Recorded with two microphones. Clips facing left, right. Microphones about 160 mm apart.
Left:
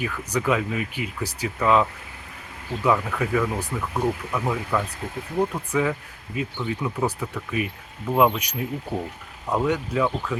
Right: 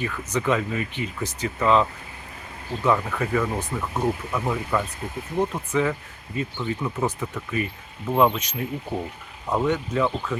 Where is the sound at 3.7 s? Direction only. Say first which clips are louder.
Even; 15° right (ahead or behind).